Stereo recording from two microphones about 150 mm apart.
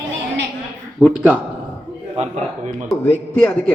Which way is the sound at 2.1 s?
45° right (ahead or behind).